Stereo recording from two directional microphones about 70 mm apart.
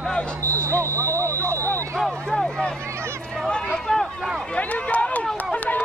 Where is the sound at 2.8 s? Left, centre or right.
Right.